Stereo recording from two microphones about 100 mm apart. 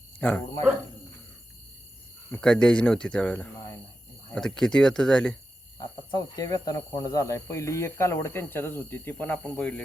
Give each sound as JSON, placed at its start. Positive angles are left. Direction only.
{"t": 0.2, "sound": "speech", "side_deg": 15}
{"t": 2.3, "sound": "speech", "side_deg": 10}
{"t": 6.1, "sound": "speech", "side_deg": 40}